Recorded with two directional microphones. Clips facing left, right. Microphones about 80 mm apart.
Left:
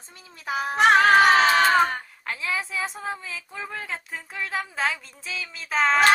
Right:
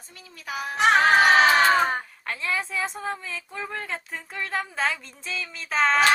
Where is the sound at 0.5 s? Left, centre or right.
Left.